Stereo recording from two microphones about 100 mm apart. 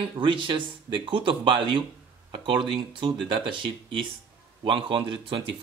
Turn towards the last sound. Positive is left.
turn(degrees=-60)  # may be behind; listen again after turning